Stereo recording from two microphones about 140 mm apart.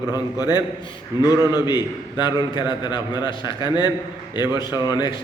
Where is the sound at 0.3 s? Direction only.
30° left (ahead or behind).